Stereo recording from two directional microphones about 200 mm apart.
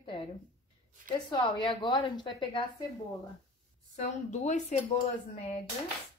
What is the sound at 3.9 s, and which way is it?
Speech, 35° left (ahead or behind).